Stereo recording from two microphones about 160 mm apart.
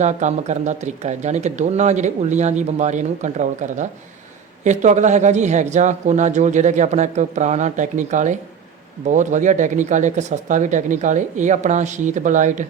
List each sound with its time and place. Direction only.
0.0 s speech: 45° right (ahead or behind)